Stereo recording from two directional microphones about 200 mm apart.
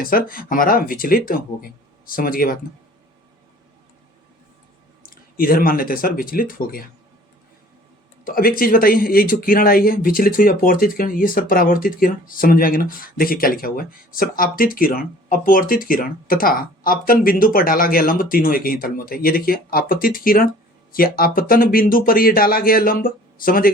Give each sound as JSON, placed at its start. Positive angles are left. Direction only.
{"t": 0.0, "sound": "speech", "side_deg": 45}
{"t": 5.0, "sound": "speech", "side_deg": 45}
{"t": 8.2, "sound": "speech", "side_deg": 45}